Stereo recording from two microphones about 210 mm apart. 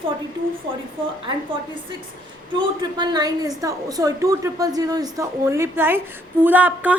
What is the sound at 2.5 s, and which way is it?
A woman's voice, 20° right (ahead or behind).